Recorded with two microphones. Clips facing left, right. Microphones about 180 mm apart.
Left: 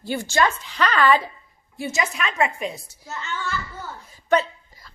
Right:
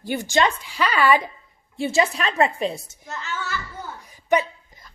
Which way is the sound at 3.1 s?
Centre (ahead or behind).